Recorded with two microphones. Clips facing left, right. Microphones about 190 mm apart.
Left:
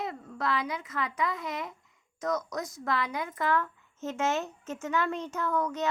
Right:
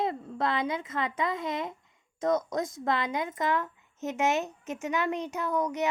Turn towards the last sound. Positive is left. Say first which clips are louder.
# right 1 dB
turn(degrees=-15)  # may be behind; listen again after turning